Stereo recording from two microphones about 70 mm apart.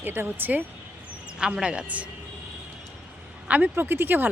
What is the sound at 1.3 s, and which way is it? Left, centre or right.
Speech, centre.